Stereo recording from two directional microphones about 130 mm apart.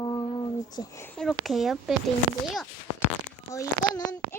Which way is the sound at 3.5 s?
25° left (ahead or behind).